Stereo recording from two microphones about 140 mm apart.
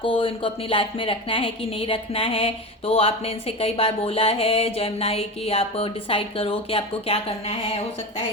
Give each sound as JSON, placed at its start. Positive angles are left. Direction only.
{"t": 0.0, "sound": "speech", "side_deg": 40}